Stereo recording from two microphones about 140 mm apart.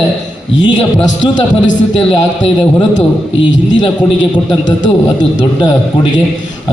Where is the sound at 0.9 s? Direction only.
35° left (ahead or behind).